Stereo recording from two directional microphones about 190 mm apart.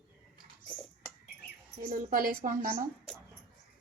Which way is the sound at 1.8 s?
45° right (ahead or behind).